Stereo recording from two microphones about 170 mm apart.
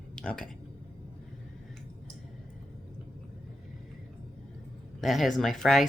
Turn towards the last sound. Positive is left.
turn(degrees=0)  # may be behind; listen again after turning